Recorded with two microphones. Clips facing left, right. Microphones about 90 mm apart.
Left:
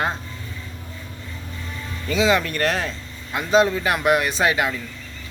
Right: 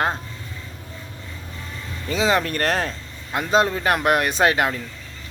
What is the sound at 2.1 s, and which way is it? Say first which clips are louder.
A man's voice: left 1 dB; 35° right (ahead or behind).